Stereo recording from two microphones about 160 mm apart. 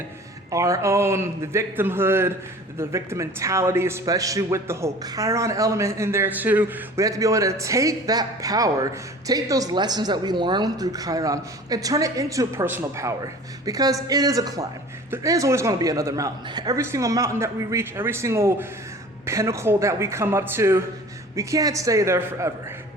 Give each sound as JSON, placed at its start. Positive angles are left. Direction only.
{"t": 0.5, "sound": "a man's voice", "side_deg": -20}